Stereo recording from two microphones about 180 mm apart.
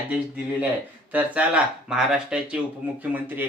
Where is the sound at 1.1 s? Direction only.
5° right (ahead or behind).